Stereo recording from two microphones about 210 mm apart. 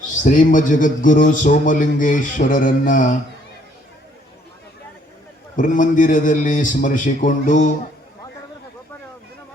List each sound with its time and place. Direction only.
0.3 s a man's voice: 40° left (ahead or behind)
5.5 s a man's voice: 40° left (ahead or behind)